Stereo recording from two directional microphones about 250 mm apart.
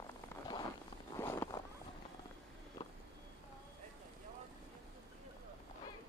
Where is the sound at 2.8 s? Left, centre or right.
Centre.